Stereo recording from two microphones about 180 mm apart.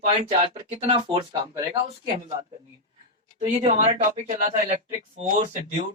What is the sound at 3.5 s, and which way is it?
Speech, 40° right (ahead or behind).